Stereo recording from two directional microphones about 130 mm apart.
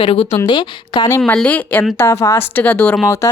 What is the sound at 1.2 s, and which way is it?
Speech, 10° left (ahead or behind).